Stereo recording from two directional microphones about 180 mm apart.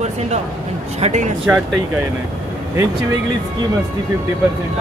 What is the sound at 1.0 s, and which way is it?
Speech, 40° right (ahead or behind).